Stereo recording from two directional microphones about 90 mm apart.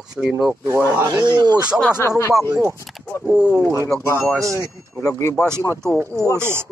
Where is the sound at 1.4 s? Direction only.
50° right (ahead or behind).